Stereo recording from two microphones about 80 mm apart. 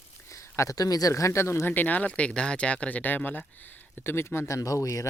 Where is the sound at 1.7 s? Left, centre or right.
Left.